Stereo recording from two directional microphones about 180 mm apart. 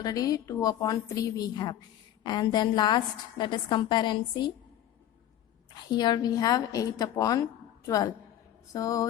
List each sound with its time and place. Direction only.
0.0 s a woman's voice: 20° left (ahead or behind)
5.7 s a woman's voice: 25° left (ahead or behind)